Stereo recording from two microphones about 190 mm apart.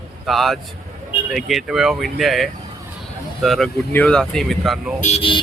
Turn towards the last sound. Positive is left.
turn(degrees=30)  # may be behind; listen again after turning